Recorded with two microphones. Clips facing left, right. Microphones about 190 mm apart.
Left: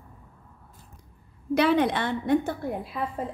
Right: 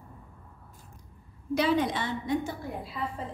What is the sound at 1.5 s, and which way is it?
A woman's voice, 65° left (ahead or behind).